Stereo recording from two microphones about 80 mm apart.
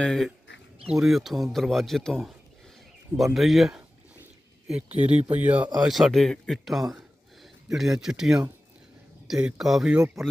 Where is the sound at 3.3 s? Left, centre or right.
Centre.